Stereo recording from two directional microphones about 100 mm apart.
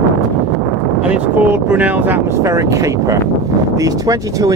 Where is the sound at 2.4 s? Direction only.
35° right (ahead or behind).